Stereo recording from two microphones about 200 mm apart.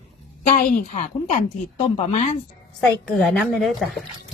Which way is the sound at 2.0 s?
30° left (ahead or behind).